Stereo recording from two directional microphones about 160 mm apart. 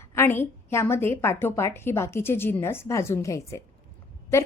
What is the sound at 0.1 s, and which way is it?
A woman's voice, 15° left (ahead or behind).